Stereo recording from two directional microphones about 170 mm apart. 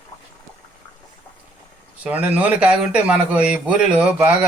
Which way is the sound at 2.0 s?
10° right (ahead or behind).